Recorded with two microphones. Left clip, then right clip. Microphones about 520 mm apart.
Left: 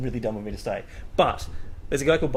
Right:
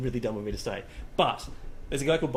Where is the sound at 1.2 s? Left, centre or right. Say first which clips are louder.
Left 4 dB; left.